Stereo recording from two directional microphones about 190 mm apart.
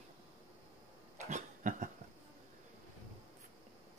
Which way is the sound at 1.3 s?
40° right (ahead or behind).